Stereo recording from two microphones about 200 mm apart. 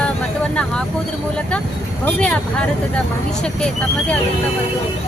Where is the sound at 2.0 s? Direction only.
5° left (ahead or behind).